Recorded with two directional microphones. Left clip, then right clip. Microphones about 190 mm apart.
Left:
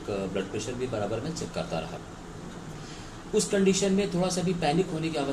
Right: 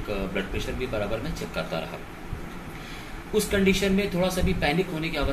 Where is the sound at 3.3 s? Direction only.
15° left (ahead or behind).